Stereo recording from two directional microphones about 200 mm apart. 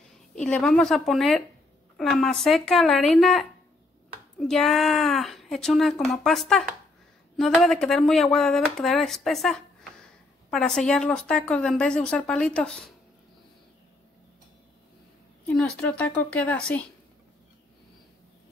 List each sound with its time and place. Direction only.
0.4 s speech: 5° left (ahead or behind)
15.5 s a woman's voice: 5° left (ahead or behind)